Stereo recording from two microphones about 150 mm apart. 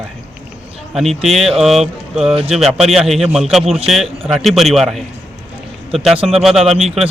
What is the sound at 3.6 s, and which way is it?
Speech, 40° right (ahead or behind).